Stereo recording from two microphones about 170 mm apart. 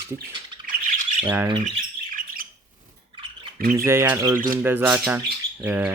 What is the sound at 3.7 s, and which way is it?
Speech, 15° right (ahead or behind).